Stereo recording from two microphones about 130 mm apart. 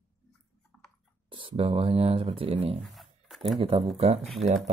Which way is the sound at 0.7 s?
5° left (ahead or behind).